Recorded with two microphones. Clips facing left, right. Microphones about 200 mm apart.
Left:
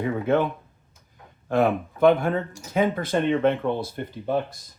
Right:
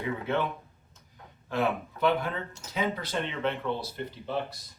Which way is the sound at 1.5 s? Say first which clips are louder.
Left 7 dB; 50° left (ahead or behind).